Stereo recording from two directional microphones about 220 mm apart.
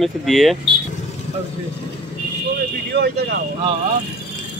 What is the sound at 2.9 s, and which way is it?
Speech, 50° right (ahead or behind).